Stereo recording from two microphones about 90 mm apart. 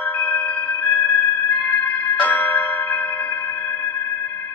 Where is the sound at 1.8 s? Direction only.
15° left (ahead or behind).